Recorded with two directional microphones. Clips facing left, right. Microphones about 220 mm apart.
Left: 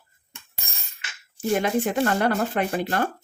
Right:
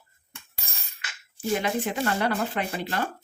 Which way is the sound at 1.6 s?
50° left (ahead or behind).